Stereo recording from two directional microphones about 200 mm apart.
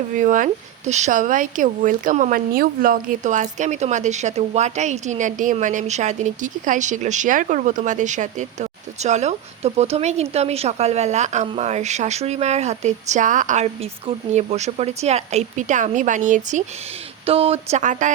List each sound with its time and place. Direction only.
0.2 s speech: 40° right (ahead or behind)